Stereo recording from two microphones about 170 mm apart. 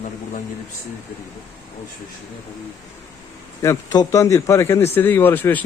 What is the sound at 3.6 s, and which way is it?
A man's voice, 20° left (ahead or behind).